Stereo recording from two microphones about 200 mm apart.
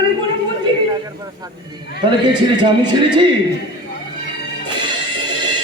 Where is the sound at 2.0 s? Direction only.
20° right (ahead or behind).